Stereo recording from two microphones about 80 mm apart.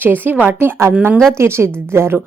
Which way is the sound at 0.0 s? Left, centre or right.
Right.